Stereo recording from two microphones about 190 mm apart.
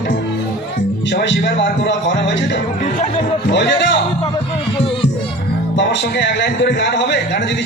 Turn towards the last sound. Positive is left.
turn(degrees=70)  # may be behind; listen again after turning